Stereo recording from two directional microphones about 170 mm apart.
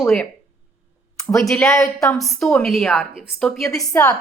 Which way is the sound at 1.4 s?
Centre (ahead or behind).